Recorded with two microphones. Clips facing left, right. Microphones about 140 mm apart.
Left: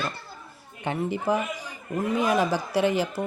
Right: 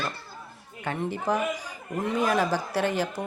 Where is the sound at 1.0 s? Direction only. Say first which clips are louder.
Left 1 dB; 10° left (ahead or behind).